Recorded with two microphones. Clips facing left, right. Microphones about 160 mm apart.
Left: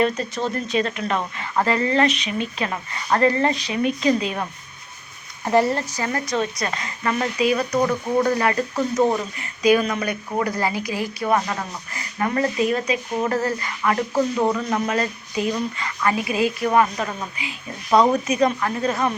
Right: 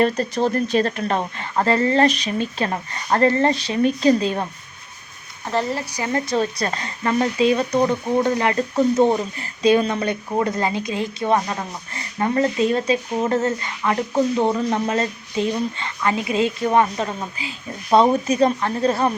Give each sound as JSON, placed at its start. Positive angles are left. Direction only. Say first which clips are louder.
{"t": 0.0, "sound": "a woman's voice", "louder": "right 3 dB", "side_deg": -40}
{"t": 5.7, "sound": "speech", "louder": "left 1 dB", "side_deg": -15}
{"t": 6.1, "sound": "a woman's voice", "louder": "right 4 dB", "side_deg": -30}